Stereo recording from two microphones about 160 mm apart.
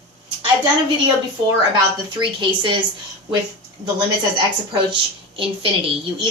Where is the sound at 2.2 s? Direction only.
30° right (ahead or behind).